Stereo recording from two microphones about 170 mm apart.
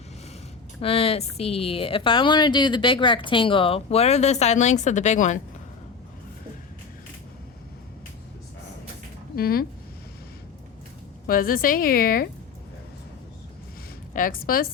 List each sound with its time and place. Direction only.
0.8 s a woman's voice: 35° left (ahead or behind)
9.3 s speech: 60° left (ahead or behind)
11.3 s a woman's voice: 55° left (ahead or behind)
14.1 s a woman's voice: 55° left (ahead or behind)